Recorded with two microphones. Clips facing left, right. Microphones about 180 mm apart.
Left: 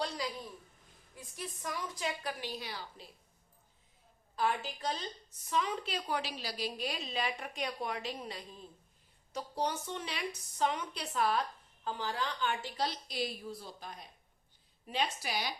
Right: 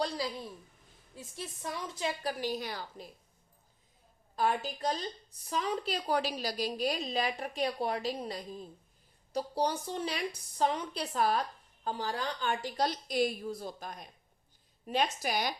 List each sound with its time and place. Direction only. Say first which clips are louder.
0.2 s speech: right 3 dB; 35° right (ahead or behind)
4.4 s speech: right 3 dB; 40° right (ahead or behind)